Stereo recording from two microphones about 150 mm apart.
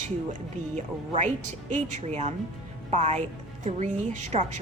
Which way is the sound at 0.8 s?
50° right (ahead or behind).